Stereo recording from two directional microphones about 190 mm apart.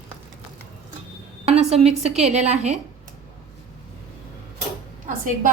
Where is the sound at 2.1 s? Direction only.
35° right (ahead or behind).